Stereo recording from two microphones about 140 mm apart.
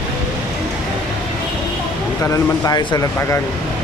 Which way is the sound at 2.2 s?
25° left (ahead or behind).